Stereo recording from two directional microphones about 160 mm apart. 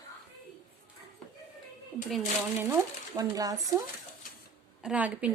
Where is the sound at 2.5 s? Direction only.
20° right (ahead or behind).